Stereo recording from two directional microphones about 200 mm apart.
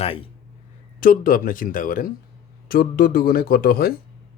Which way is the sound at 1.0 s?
45° left (ahead or behind).